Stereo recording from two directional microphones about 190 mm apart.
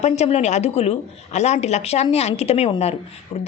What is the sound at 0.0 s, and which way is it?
A man's voice, 35° left (ahead or behind).